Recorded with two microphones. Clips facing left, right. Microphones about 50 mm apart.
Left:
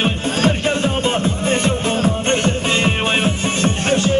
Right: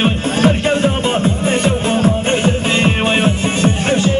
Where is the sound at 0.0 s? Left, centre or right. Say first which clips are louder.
Right 3 dB; centre.